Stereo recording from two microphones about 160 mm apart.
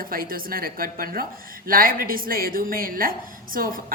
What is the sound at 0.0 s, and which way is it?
A woman's voice, 65° right (ahead or behind).